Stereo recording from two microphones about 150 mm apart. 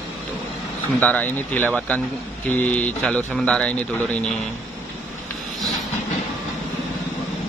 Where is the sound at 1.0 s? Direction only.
10° left (ahead or behind).